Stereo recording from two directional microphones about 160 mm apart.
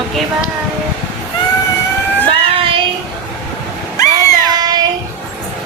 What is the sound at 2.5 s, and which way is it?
Child singing, 35° right (ahead or behind).